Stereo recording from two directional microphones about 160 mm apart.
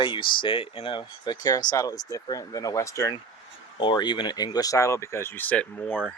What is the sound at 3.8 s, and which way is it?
Speech, 30° left (ahead or behind).